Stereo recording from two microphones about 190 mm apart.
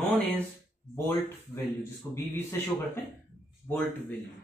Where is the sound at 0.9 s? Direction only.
15° left (ahead or behind).